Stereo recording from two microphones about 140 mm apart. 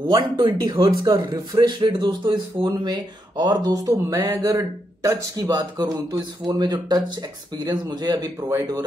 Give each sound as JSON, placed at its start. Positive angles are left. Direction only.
{"t": 0.1, "sound": "speech", "side_deg": -30}